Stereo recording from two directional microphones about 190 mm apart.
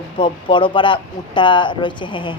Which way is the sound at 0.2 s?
25° left (ahead or behind).